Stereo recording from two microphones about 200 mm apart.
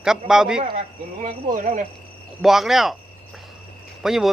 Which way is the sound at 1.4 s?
40° right (ahead or behind).